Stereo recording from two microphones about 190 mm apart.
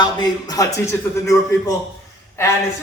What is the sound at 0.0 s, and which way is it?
A man's voice, 20° left (ahead or behind).